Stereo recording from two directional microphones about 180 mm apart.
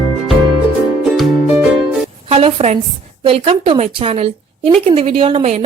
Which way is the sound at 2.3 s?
35° right (ahead or behind).